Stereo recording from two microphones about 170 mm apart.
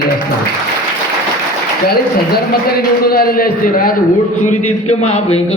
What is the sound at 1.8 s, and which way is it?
A man's voice, 65° left (ahead or behind).